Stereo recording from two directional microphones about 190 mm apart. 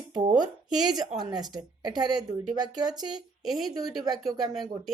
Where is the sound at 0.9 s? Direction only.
20° right (ahead or behind).